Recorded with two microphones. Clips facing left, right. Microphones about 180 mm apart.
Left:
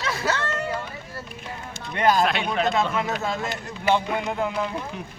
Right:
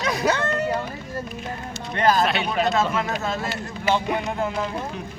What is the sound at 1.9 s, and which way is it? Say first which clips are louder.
Speech: right 1 dB; 15° left (ahead or behind).